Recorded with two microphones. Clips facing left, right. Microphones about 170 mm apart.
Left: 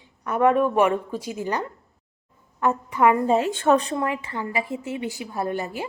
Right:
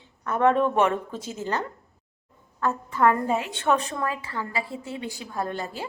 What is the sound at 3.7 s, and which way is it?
Speech, 35° left (ahead or behind).